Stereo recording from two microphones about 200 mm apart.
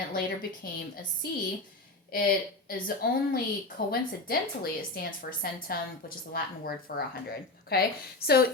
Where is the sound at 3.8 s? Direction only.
55° left (ahead or behind).